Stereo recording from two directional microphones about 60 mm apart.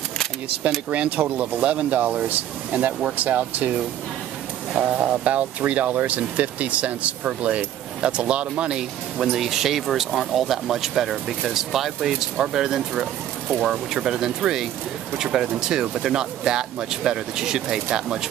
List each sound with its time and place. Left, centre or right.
0.8 s speech: right